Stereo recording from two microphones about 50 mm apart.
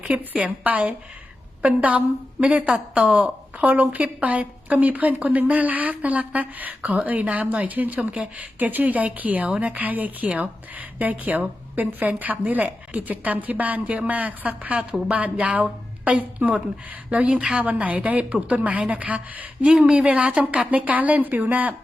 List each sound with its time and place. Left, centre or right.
0.0 s a woman's voice: right
17.6 s a woman's voice: right